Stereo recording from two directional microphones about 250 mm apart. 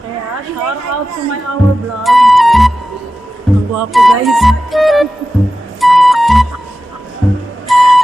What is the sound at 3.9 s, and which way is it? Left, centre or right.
Music, centre.